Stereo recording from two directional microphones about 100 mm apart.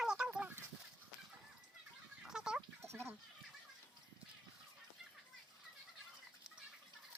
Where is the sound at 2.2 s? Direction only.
5° right (ahead or behind).